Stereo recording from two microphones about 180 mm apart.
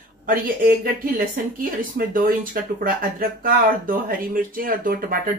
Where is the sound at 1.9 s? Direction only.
50° right (ahead or behind).